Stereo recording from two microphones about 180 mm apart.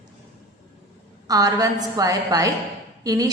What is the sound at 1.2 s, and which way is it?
A woman's voice, 20° right (ahead or behind).